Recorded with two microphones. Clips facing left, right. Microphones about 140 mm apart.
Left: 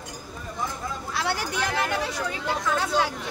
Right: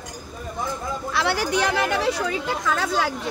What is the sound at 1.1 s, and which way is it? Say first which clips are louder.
Speech: right 6 dB; 80° right.